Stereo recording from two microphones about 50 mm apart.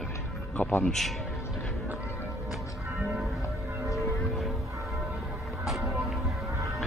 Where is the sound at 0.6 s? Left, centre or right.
Left.